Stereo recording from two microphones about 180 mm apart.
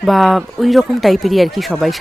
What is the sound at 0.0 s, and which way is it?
Speech, centre (ahead or behind).